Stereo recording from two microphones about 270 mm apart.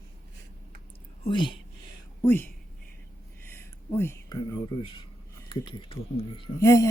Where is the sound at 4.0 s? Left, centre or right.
Centre.